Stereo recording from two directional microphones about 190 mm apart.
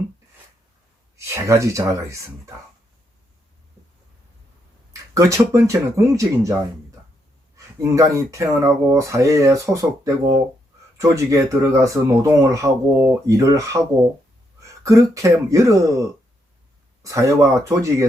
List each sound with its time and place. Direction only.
1.1 s speech: 15° right (ahead or behind)
5.1 s speech: 15° right (ahead or behind)